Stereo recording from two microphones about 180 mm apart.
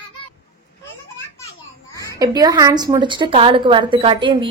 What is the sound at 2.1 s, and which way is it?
A woman's voice, 20° right (ahead or behind).